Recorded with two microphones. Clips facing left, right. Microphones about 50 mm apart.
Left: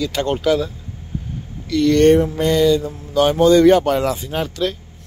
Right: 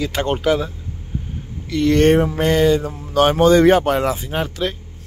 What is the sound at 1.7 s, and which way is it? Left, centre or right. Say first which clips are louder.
Speech: left 2 dB; right.